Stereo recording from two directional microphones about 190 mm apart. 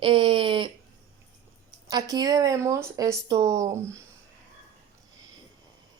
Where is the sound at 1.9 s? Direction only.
20° right (ahead or behind).